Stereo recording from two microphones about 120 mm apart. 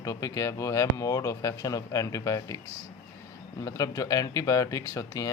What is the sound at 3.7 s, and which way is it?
Speech, 30° left (ahead or behind).